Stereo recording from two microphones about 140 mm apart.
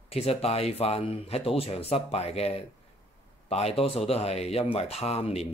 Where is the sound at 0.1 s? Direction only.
45° left (ahead or behind).